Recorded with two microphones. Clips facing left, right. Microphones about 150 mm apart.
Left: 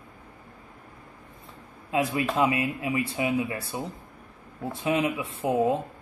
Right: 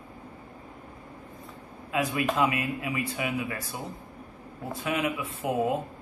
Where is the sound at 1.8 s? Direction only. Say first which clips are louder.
Left 2 dB; 30° left (ahead or behind).